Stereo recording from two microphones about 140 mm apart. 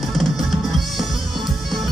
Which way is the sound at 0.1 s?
Centre (ahead or behind).